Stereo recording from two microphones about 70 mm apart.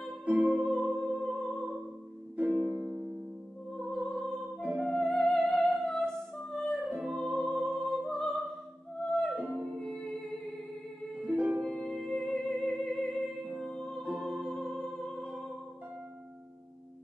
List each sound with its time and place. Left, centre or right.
0.2 s music: right
0.7 s music: centre
2.3 s music: right
2.6 s music: centre
3.7 s music: centre
6.9 s music: centre
7.2 s music: centre
8.0 s opera: centre
8.3 s opera: centre
9.0 s music: centre
9.3 s music: right
9.6 s music: centre
11.2 s music: centre
11.6 s music: centre